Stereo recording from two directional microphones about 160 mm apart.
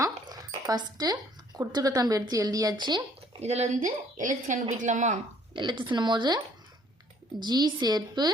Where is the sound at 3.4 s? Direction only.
45° right (ahead or behind).